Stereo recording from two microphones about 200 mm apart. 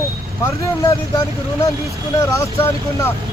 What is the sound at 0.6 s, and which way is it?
Speech, 15° left (ahead or behind).